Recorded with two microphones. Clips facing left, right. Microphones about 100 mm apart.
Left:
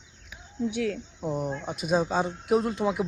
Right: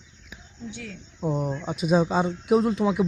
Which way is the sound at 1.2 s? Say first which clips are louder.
Right 6 dB; centre (ahead or behind).